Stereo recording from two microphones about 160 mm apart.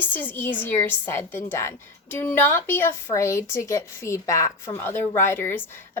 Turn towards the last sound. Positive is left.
turn(degrees=15)  # may be behind; listen again after turning